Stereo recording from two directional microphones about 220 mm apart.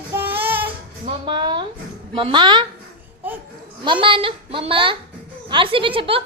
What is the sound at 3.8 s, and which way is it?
A woman's voice, 20° right (ahead or behind).